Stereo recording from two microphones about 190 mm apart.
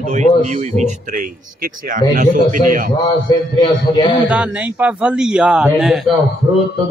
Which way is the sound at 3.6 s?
25° left (ahead or behind).